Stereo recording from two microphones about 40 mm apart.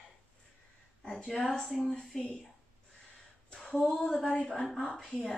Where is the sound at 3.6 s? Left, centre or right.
Left; by 5.3 s centre.